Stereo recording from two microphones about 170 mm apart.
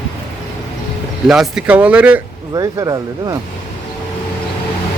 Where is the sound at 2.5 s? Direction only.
20° right (ahead or behind).